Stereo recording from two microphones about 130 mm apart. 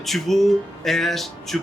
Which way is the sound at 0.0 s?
Centre (ahead or behind).